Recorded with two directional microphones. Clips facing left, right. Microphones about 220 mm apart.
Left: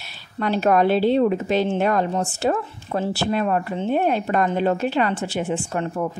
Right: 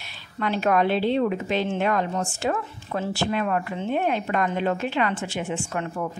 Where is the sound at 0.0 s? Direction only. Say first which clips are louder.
Left 3 dB; 40° left (ahead or behind).